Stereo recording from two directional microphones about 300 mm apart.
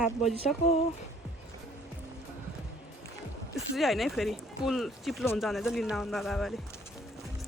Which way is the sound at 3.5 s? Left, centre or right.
Centre.